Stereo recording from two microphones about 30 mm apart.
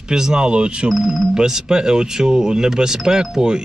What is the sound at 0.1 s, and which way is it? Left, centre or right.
Speech, right.